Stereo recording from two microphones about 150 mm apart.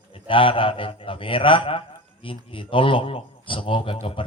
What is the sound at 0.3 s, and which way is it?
A man's voice, 35° left (ahead or behind).